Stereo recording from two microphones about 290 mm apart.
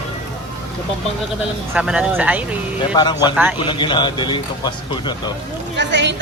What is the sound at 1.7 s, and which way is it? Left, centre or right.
Speech, centre.